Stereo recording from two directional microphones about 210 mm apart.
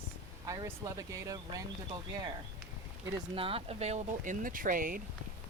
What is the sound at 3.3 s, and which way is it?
Speech, 25° right (ahead or behind).